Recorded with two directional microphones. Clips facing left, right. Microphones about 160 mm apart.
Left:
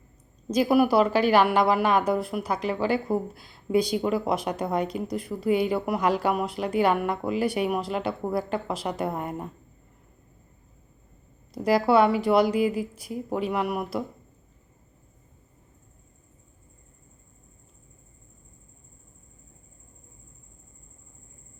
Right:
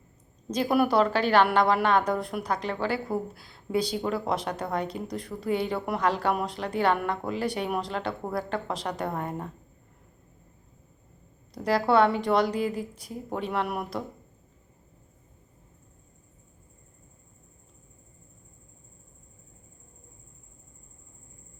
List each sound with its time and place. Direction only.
0.5 s a woman's voice: 10° left (ahead or behind)
11.5 s a woman's voice: 10° left (ahead or behind)